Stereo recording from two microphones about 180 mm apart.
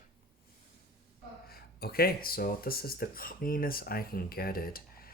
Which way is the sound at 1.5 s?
60° left (ahead or behind).